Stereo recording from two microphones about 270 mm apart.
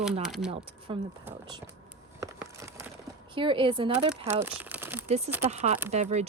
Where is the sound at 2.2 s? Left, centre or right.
Centre.